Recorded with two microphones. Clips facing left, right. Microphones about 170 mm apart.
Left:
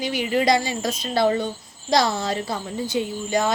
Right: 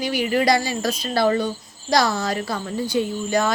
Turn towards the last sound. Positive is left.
turn(degrees=20)  # may be behind; listen again after turning